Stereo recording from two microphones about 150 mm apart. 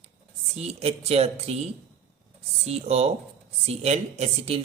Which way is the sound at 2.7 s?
45° right (ahead or behind).